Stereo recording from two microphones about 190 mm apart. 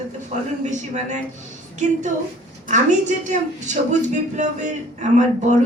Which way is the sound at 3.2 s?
40° right (ahead or behind).